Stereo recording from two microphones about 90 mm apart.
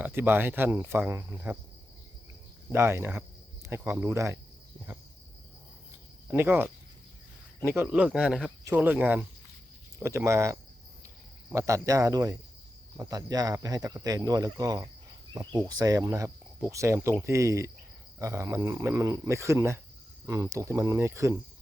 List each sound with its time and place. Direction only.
0.0 s speech: 25° right (ahead or behind)
2.7 s speech: 30° right (ahead or behind)
6.2 s speech: 25° right (ahead or behind)
7.9 s a man's voice: 15° right (ahead or behind)
8.7 s a man's voice: 20° right (ahead or behind)
10.0 s speech: 30° right (ahead or behind)